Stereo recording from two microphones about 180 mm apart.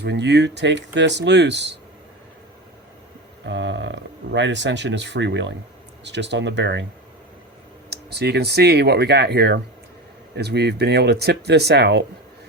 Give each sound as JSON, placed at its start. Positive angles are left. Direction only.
{"t": 0.0, "sound": "speech", "side_deg": -75}
{"t": 3.4, "sound": "speech", "side_deg": -85}
{"t": 7.9, "sound": "speech", "side_deg": -65}